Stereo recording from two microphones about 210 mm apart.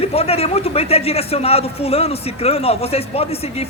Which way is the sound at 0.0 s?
30° left (ahead or behind).